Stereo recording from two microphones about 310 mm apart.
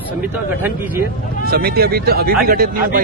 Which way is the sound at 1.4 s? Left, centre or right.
Right.